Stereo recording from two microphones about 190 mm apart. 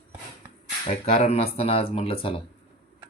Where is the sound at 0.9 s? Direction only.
30° left (ahead or behind).